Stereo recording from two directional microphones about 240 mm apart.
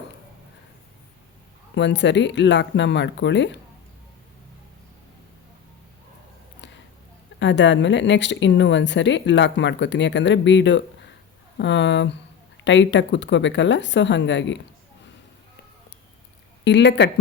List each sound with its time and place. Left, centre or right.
1.7 s speech: left
7.3 s speech: left
16.6 s speech: left